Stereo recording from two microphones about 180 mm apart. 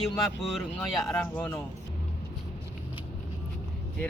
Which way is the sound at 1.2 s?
10° left (ahead or behind).